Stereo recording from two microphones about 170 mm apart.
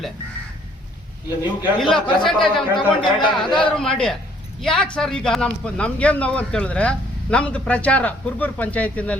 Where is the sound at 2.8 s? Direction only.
30° left (ahead or behind).